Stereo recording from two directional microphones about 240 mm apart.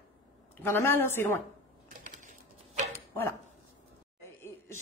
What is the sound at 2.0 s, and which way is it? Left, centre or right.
Typewriter, right.